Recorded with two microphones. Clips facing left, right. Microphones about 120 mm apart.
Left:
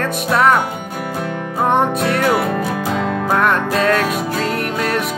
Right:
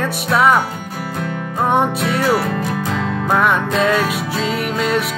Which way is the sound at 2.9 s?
45° left (ahead or behind).